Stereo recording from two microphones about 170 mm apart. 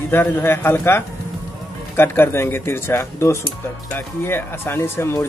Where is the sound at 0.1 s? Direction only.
15° left (ahead or behind).